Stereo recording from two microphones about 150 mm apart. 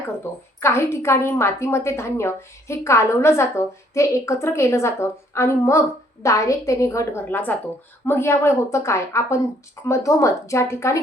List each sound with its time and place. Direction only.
0.3 s a woman's voice: 15° left (ahead or behind)